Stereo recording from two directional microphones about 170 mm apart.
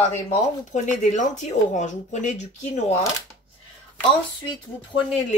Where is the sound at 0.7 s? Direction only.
45° left (ahead or behind).